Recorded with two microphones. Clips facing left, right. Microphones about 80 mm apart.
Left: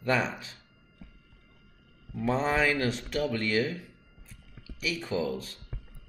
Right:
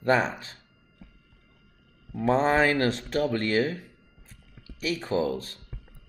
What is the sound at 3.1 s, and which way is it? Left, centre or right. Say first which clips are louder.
Speech: right 3 dB; right.